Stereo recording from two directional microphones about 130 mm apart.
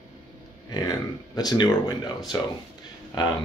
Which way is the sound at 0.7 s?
30° left (ahead or behind).